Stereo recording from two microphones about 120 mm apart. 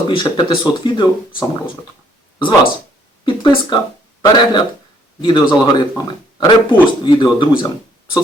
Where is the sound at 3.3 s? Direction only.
45° left (ahead or behind).